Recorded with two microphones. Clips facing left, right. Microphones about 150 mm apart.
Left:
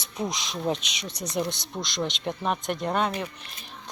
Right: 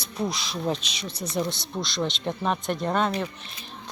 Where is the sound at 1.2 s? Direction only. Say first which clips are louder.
Right 1 dB; centre (ahead or behind).